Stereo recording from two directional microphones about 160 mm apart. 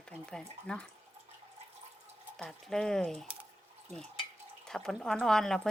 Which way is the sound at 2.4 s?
Centre (ahead or behind).